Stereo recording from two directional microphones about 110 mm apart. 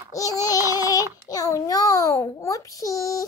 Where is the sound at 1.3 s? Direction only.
30° left (ahead or behind).